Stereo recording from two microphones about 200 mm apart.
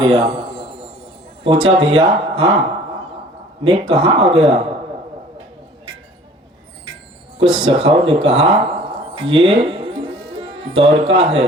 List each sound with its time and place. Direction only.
0.0 s a sound: 25° right (ahead or behind)
1.5 s speech: 25° right (ahead or behind)
3.6 s speech: 25° right (ahead or behind)
7.3 s speech: 25° right (ahead or behind)